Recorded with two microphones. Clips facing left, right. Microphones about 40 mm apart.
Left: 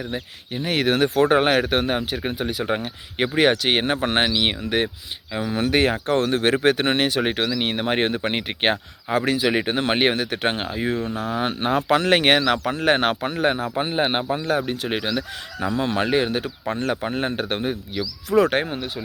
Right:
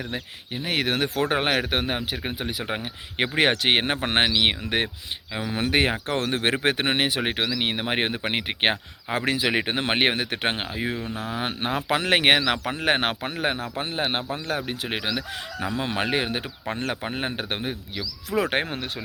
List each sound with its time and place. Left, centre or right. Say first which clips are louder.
0.5 s speech: left 4 dB; centre
3.3 s speech: left 2 dB; right
5.3 s speech: left 4 dB; centre
5.5 s speech: left 3 dB; right
9.1 s speech: left 3 dB; right
10.6 s speech: left 4 dB; centre
13.1 s speech: left 5 dB; centre
13.7 s speech: left 5 dB; left
14.7 s speech: left 4 dB; centre
15.7 s speech: left 5 dB; right
17.6 s speech: left 5 dB; centre